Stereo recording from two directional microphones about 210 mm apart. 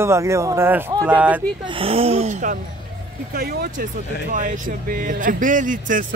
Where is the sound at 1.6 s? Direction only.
25° right (ahead or behind).